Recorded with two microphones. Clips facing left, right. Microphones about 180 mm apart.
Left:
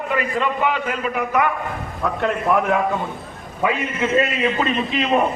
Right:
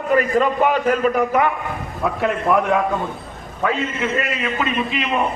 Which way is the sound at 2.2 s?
Centre (ahead or behind).